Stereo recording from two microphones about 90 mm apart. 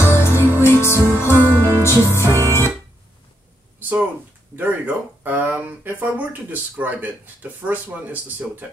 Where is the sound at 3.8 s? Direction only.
20° right (ahead or behind).